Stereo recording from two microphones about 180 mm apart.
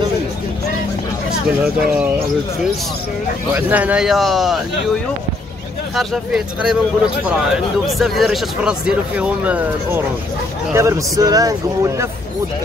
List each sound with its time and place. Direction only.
1.6 s speech: 5° right (ahead or behind)
3.5 s speech: 10° right (ahead or behind)
5.9 s a man's voice: 5° right (ahead or behind)